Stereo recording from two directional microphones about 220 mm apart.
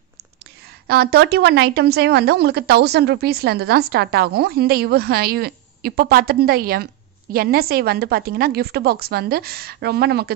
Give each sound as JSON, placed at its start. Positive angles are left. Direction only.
{"t": 0.8, "sound": "a woman's voice", "side_deg": -45}